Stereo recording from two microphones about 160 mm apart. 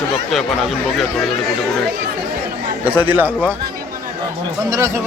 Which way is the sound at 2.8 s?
10° right (ahead or behind).